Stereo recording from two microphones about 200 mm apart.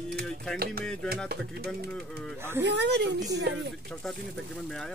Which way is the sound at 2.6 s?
60° right (ahead or behind).